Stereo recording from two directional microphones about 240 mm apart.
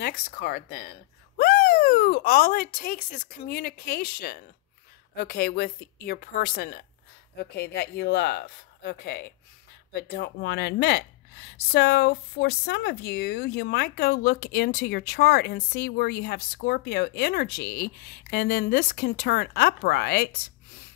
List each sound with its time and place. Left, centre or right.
0.0 s speech: left